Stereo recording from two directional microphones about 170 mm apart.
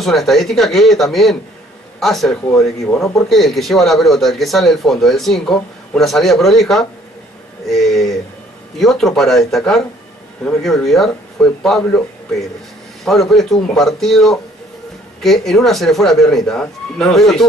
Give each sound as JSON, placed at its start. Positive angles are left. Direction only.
{"t": 0.0, "sound": "speech", "side_deg": 0}
{"t": 2.5, "sound": "speech", "side_deg": 15}
{"t": 3.3, "sound": "speech", "side_deg": 0}
{"t": 13.0, "sound": "speech", "side_deg": 0}